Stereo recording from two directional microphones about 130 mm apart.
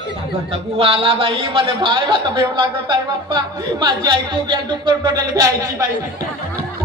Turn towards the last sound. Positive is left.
turn(degrees=-30)  # may be behind; listen again after turning